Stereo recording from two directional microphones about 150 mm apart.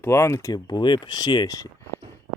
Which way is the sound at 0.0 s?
15° left (ahead or behind).